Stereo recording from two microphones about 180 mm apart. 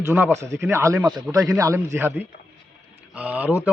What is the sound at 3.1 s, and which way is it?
Speech, 10° right (ahead or behind).